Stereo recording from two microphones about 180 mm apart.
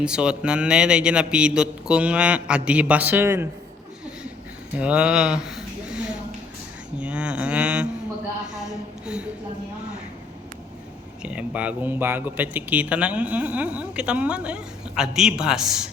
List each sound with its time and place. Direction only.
0.0 s a man's voice: 5° right (ahead or behind)
4.8 s speech: 5° right (ahead or behind)
7.0 s mantra: 5° right (ahead or behind)
8.5 s a sound: 5° right (ahead or behind)
11.2 s speech: 5° right (ahead or behind)